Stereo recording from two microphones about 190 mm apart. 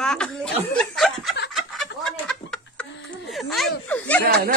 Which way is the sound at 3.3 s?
Centre (ahead or behind).